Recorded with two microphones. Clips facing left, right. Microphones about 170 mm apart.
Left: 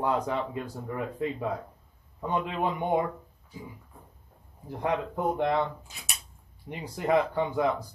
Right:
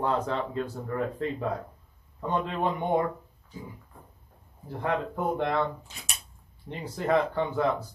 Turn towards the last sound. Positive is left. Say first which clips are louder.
# even
turn(degrees=15)  # may be behind; listen again after turning